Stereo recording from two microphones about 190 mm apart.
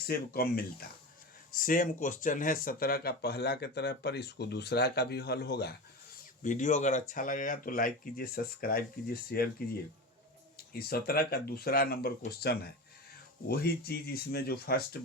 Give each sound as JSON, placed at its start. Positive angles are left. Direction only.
{"t": 0.1, "sound": "speech", "side_deg": 55}
{"t": 6.4, "sound": "speech", "side_deg": 40}